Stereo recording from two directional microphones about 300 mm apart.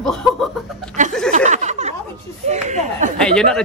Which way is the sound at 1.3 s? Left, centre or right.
Right.